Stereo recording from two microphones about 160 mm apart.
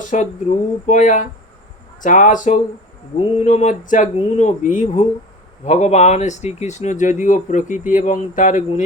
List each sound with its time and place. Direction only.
0.1 s speech: 50° left (ahead or behind)